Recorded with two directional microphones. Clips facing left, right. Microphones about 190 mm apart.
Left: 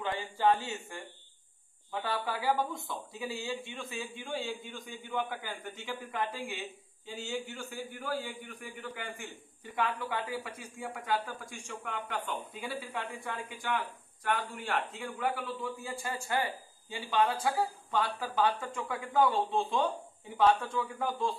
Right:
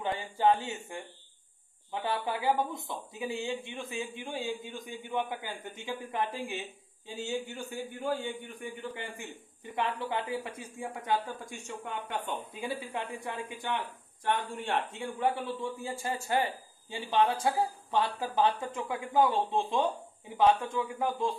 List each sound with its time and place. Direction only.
0.4 s a man's voice: 20° right (ahead or behind)